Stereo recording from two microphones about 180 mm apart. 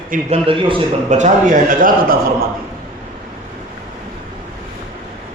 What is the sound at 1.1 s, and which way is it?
A man's voice, 40° right (ahead or behind).